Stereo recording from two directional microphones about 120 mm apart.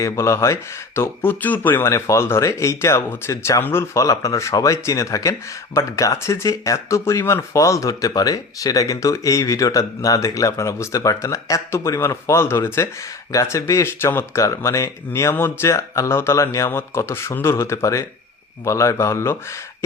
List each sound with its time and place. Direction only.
0.0 s speech: 25° left (ahead or behind)